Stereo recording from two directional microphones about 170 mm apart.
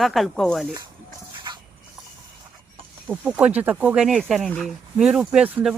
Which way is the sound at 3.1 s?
10° right (ahead or behind).